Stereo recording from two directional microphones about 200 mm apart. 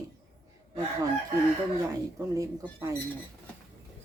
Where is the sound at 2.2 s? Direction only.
15° right (ahead or behind).